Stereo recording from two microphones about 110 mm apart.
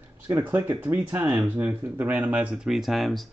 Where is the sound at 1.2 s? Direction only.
35° right (ahead or behind).